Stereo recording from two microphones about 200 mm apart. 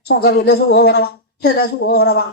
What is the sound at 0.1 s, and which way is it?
A woman's voice, 55° left (ahead or behind).